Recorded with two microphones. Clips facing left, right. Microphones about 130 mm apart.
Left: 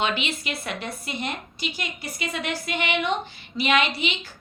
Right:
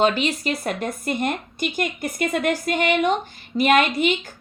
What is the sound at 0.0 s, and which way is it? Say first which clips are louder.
Speech: right 7 dB; 40° right (ahead or behind).